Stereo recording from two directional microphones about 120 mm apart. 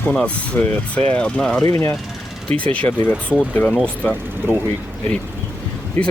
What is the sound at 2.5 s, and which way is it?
Speech, 10° left (ahead or behind).